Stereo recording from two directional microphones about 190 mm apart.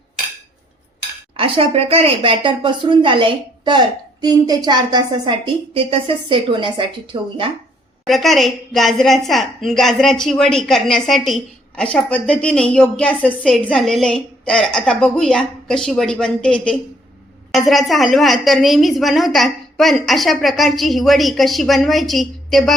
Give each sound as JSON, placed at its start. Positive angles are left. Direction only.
{"t": 1.4, "sound": "a woman's voice", "side_deg": -30}
{"t": 8.0, "sound": "a woman's voice", "side_deg": 0}